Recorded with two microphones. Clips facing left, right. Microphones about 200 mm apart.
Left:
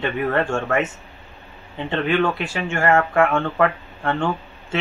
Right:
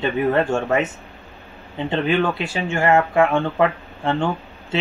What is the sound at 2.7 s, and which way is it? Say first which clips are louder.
Speech: right 1 dB; 15° right (ahead or behind).